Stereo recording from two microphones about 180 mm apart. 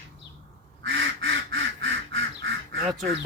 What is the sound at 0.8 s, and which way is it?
Quack, 90° right.